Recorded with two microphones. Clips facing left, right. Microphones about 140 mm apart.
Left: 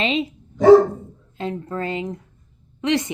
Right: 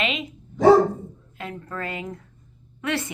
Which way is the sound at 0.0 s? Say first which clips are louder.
Left 5 dB; 30° left (ahead or behind).